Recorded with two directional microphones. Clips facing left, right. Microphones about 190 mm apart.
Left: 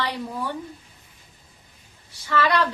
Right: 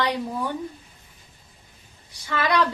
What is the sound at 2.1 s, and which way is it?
Speech, 15° right (ahead or behind).